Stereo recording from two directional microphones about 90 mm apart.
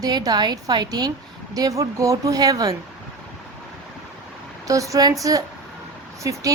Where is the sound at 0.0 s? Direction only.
45° right (ahead or behind).